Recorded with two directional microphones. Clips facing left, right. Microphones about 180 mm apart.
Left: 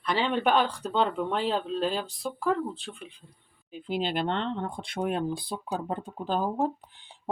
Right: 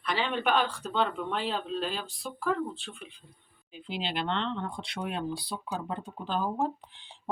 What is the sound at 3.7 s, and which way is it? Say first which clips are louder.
Speech: left 6 dB; 45° left (ahead or behind).